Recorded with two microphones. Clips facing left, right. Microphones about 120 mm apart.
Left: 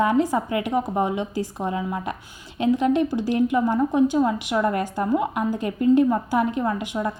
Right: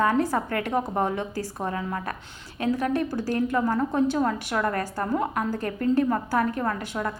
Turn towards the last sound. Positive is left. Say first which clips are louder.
# left 3 dB
turn(degrees=20)  # may be behind; listen again after turning